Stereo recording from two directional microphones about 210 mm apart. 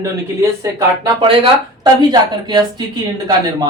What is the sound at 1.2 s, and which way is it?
A woman's voice, 25° right (ahead or behind).